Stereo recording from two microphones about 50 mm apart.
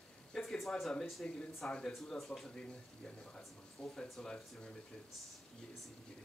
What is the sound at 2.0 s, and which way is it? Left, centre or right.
Speech, centre.